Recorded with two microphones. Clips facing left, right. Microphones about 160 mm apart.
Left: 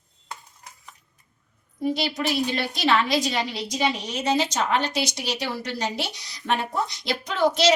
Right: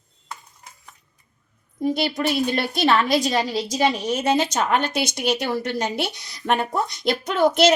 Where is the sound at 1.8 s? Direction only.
50° right (ahead or behind).